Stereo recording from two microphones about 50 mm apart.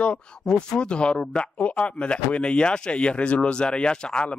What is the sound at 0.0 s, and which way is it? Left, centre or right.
Speech, centre.